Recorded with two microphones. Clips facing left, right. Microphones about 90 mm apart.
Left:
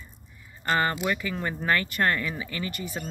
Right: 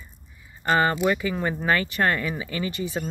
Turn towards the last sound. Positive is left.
turn(degrees=-20)  # may be behind; listen again after turning